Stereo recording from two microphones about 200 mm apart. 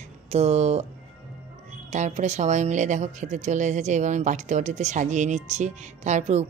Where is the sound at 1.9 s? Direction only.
35° right (ahead or behind).